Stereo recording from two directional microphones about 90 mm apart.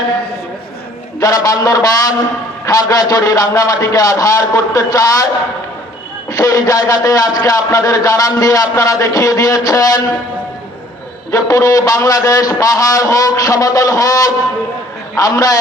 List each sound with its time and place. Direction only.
1.2 s a man's voice: 40° left (ahead or behind)
6.3 s a man's voice: 40° left (ahead or behind)
11.3 s a man's voice: 40° left (ahead or behind)